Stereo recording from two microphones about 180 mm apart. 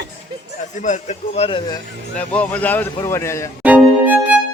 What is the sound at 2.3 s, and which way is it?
Speech, 5° left (ahead or behind).